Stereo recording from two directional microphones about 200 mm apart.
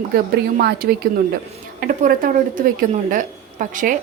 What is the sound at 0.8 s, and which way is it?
A woman's voice, 50° right (ahead or behind).